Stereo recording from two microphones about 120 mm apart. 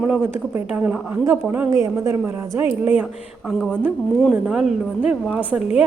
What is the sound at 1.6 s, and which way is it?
A woman's voice, 25° right (ahead or behind).